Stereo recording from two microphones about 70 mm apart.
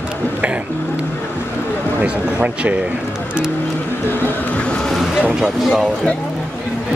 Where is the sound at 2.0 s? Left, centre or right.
Centre.